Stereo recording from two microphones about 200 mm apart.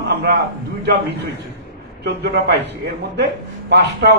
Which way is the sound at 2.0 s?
55° right (ahead or behind).